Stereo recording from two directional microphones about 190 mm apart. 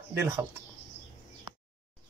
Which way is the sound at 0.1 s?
10° right (ahead or behind).